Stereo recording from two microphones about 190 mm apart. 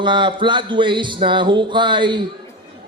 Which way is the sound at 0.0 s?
25° right (ahead or behind).